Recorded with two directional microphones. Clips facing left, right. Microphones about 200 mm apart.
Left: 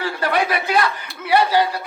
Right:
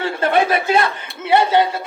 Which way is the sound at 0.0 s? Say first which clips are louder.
Right 4 dB; 25° right (ahead or behind).